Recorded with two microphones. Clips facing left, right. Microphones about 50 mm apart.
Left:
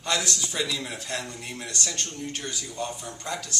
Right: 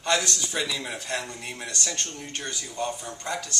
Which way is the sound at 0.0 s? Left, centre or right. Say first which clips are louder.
Right 2 dB; centre.